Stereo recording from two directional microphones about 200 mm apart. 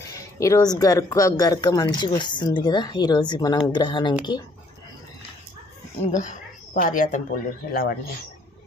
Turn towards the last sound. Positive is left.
turn(degrees=45)  # may be behind; listen again after turning